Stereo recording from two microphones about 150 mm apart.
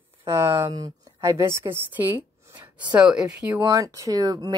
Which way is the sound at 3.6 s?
20° right (ahead or behind).